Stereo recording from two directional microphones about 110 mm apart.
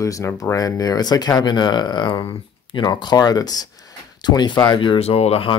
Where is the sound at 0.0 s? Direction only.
30° left (ahead or behind); by 5.0 s 45° left (ahead or behind).